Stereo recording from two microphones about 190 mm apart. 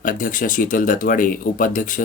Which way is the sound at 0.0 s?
45° left (ahead or behind).